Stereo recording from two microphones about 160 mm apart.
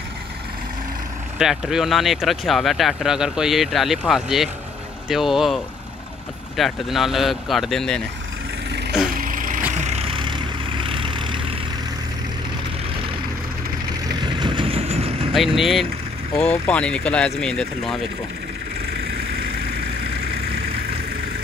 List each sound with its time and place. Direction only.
1.4 s speech: 5° right (ahead or behind)
9.1 s vehicle: 60° right (ahead or behind)
9.7 s vehicle: 45° right (ahead or behind); by 11.6 s 30° right (ahead or behind)
14.2 s vehicle: 30° right (ahead or behind)
15.3 s speech: centre (ahead or behind)